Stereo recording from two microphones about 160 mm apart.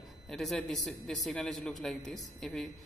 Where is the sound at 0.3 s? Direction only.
5° left (ahead or behind).